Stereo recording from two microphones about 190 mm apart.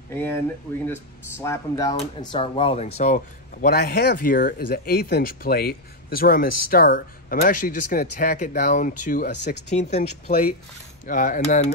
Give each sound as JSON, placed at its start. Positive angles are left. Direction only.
{"t": 0.1, "sound": "speech", "side_deg": 10}
{"t": 1.4, "sound": "speech", "side_deg": 15}
{"t": 2.0, "sound": "speech", "side_deg": 30}
{"t": 3.6, "sound": "speech", "side_deg": 55}